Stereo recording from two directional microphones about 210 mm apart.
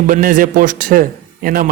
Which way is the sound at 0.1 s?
40° right (ahead or behind).